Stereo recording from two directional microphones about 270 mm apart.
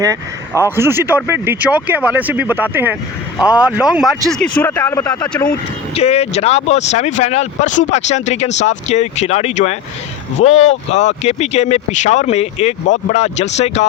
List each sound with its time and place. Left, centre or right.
0.0 s speech: centre
5.5 s speech: left